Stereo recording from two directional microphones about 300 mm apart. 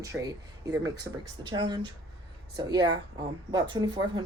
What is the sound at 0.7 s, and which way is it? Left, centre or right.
Speech, centre.